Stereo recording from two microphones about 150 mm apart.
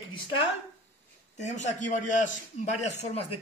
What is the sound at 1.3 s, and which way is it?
Speech, 50° left (ahead or behind).